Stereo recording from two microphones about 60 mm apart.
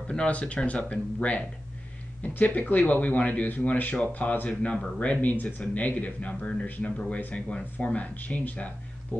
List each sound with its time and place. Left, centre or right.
0.1 s speech: centre